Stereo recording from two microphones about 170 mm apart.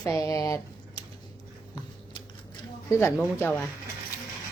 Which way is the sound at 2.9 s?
15° left (ahead or behind).